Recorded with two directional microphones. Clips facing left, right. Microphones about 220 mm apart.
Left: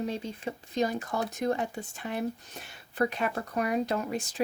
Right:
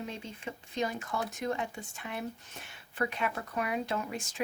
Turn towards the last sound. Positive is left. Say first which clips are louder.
# left 5 dB
turn(degrees=35)  # may be behind; listen again after turning